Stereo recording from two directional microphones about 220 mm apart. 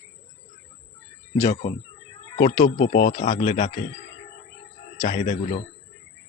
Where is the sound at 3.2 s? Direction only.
30° left (ahead or behind).